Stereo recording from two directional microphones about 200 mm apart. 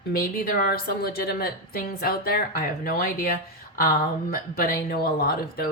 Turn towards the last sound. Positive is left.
turn(degrees=50)  # may be behind; listen again after turning